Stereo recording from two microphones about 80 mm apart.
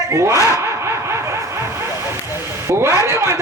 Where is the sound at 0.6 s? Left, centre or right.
Right.